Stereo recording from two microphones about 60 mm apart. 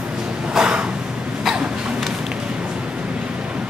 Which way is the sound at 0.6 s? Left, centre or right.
Centre.